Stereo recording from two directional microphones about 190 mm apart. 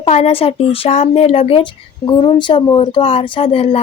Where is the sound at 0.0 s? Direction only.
35° left (ahead or behind).